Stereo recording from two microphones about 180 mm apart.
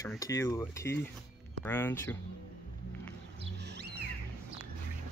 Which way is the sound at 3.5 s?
70° right (ahead or behind).